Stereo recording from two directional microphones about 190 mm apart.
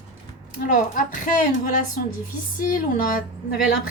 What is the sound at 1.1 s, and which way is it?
Speech, 45° left (ahead or behind).